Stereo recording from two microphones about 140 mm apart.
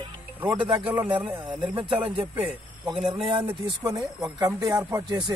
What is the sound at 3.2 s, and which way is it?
Speech, 35° right (ahead or behind).